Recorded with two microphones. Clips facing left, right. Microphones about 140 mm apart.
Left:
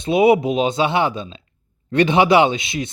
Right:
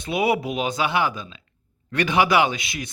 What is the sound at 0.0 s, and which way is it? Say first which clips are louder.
Speech: left 8 dB; 25° left (ahead or behind).